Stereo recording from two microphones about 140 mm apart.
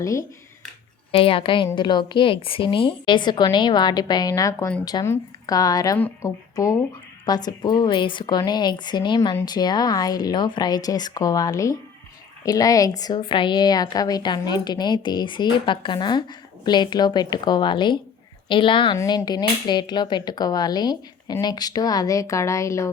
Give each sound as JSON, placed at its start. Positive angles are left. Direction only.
{"t": 0.0, "sound": "cap gun", "side_deg": 20}
{"t": 1.1, "sound": "a woman's voice", "side_deg": 40}
{"t": 5.0, "sound": "cap gun", "side_deg": 20}
{"t": 7.3, "sound": "a woman's voice", "side_deg": 30}
{"t": 10.8, "sound": "cap gun", "side_deg": 25}
{"t": 12.5, "sound": "a woman's voice", "side_deg": 25}
{"t": 18.9, "sound": "cap gun", "side_deg": 30}